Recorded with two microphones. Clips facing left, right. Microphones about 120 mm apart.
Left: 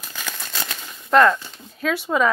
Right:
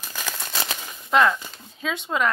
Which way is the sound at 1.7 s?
10° left (ahead or behind).